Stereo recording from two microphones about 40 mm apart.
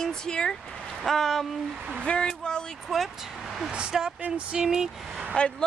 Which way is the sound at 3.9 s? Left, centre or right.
Centre.